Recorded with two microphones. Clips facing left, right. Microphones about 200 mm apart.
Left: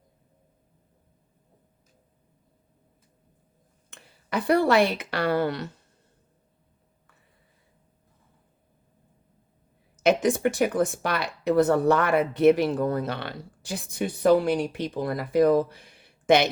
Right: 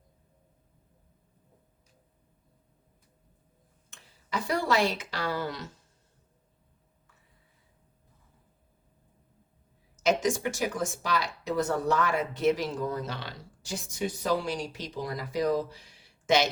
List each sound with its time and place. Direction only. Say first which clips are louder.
3.8 s a woman's voice: left 7 dB; 60° left (ahead or behind)
10.0 s speech: left 5 dB; 60° left (ahead or behind)